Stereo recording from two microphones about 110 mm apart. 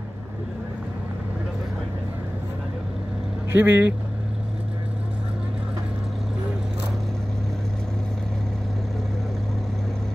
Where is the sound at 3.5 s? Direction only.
20° right (ahead or behind).